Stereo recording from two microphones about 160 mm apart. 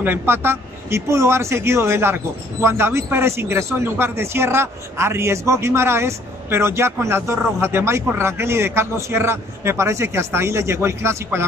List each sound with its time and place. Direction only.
0.0 s a man's voice: 15° right (ahead or behind)